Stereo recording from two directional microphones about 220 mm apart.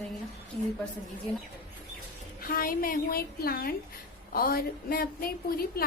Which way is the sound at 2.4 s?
40° left (ahead or behind).